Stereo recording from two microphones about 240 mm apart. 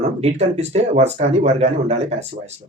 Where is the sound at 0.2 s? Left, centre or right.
Right.